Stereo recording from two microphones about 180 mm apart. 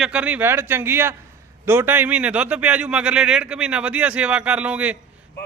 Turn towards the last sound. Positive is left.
turn(degrees=-5)  # may be behind; listen again after turning